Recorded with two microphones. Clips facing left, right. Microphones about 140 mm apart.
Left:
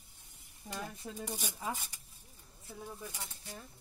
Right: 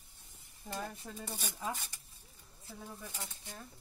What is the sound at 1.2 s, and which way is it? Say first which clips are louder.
Speech: left 2 dB; 15° left (ahead or behind).